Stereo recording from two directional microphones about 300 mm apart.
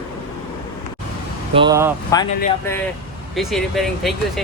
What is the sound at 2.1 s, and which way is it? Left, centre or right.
Speech, centre.